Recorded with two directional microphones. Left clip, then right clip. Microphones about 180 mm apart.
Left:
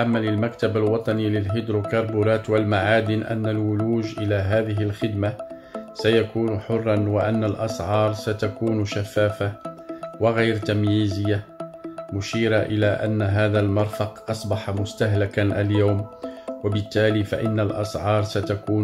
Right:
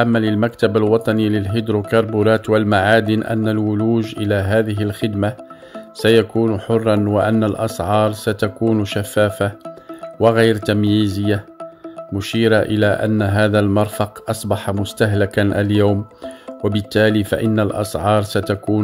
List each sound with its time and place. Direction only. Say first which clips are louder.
0.0 s speech: right 6 dB; 45° right (ahead or behind)